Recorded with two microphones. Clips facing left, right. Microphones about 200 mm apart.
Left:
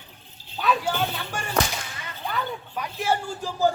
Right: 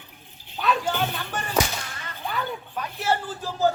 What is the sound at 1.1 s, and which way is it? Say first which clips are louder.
Speech: right 1 dB; 10° left (ahead or behind).